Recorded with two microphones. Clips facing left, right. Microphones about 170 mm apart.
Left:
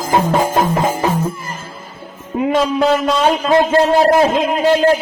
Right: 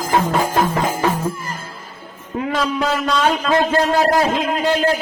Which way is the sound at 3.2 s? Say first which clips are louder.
Left 1 dB; 25° left (ahead or behind).